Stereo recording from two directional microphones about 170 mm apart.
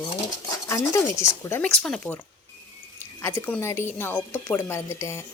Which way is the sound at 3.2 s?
15° left (ahead or behind).